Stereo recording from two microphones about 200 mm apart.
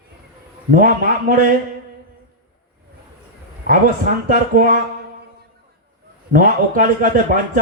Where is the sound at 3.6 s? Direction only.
45° right (ahead or behind).